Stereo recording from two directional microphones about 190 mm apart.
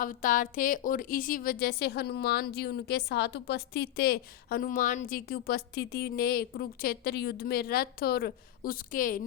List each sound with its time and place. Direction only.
0.0 s a woman's voice: 45° left (ahead or behind)